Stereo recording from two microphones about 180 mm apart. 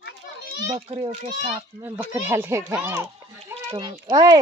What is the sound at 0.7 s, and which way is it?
Speech, 35° right (ahead or behind).